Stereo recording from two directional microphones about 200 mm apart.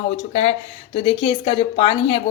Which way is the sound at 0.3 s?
30° left (ahead or behind).